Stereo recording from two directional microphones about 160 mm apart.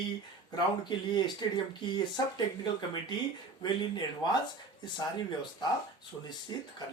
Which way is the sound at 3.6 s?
25° left (ahead or behind).